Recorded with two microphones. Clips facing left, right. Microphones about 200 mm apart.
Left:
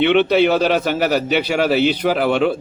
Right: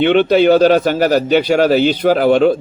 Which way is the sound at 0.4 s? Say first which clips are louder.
Right 6 dB; 35° right (ahead or behind).